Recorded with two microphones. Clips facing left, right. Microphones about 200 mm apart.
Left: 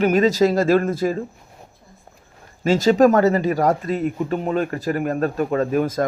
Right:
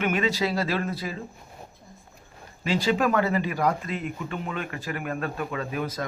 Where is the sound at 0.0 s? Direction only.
40° left (ahead or behind).